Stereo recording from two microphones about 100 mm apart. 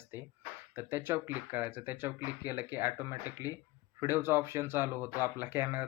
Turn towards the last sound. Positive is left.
turn(degrees=-25)  # may be behind; listen again after turning